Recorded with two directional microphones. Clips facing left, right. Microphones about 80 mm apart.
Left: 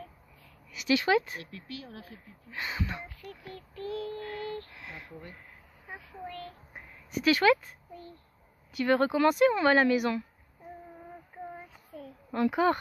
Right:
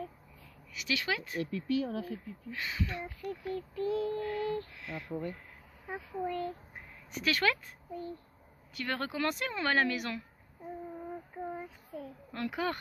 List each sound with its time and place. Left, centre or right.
0.7 s speech: left
2.5 s speech: left
3.1 s speech: centre
6.1 s speech: centre
7.1 s a woman's voice: centre
8.7 s a woman's voice: centre
11.9 s speech: centre
12.3 s speech: centre